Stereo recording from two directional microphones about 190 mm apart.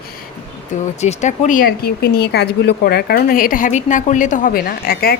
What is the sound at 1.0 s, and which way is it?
Speech, 35° left (ahead or behind).